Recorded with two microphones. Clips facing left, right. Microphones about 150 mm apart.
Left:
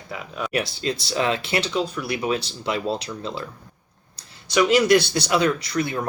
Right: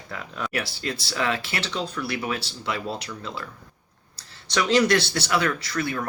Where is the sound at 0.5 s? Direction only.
20° left (ahead or behind).